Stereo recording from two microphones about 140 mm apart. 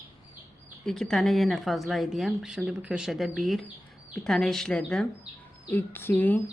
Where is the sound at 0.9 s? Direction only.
5° left (ahead or behind).